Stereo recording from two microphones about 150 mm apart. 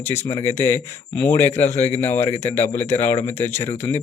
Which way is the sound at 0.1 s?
15° left (ahead or behind).